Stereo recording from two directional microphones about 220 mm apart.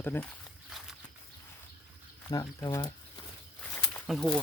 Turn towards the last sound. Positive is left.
turn(degrees=0)  # may be behind; listen again after turning